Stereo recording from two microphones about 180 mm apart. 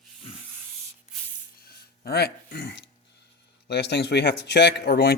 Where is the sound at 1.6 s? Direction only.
60° left (ahead or behind).